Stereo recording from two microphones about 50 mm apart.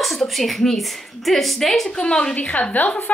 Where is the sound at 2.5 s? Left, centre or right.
Left.